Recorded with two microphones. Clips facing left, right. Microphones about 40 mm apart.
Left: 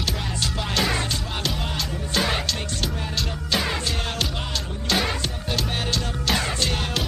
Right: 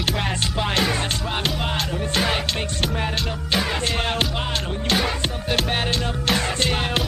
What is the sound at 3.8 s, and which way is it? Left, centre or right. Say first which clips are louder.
Music: right 4 dB; right.